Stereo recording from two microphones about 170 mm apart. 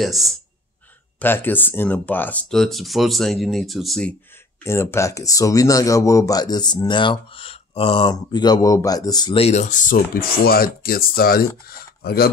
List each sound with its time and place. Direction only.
0.0 s speech: centre (ahead or behind)
1.2 s speech: 10° left (ahead or behind)
4.6 s speech: 15° left (ahead or behind); by 12.3 s 65° left (ahead or behind)